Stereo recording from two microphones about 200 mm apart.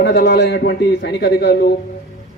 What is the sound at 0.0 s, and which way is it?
A man's voice, 55° left (ahead or behind).